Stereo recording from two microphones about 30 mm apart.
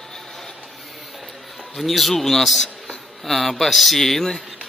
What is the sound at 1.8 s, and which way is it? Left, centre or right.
Speech, centre.